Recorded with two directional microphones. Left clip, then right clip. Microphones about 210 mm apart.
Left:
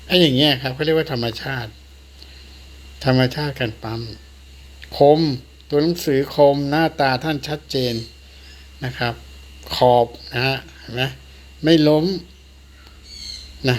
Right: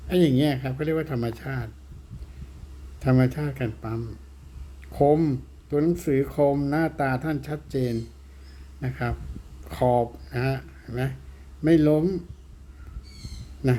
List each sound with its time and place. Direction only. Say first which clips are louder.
0.1 s speech: left 7 dB; centre (ahead or behind)
3.0 s speech: left 6 dB; centre (ahead or behind)